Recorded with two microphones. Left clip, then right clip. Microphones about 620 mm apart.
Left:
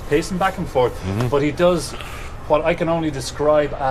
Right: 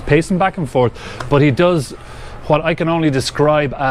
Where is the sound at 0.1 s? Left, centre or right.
Right.